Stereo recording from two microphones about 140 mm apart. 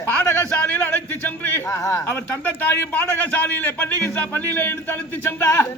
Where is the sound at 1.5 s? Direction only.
15° left (ahead or behind).